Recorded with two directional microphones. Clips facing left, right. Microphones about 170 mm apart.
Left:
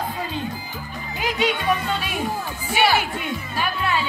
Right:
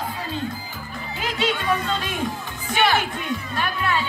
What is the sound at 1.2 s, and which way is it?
Speech, 15° left (ahead or behind).